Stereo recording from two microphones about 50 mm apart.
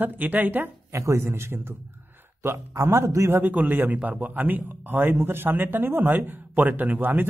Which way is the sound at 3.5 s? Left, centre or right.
Right.